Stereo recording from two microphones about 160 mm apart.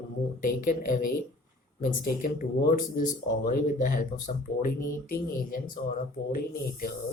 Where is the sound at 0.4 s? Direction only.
60° left (ahead or behind).